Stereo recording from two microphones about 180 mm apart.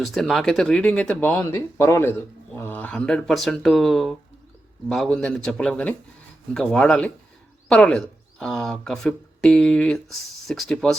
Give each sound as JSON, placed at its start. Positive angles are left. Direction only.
{"t": 0.0, "sound": "speech", "side_deg": 0}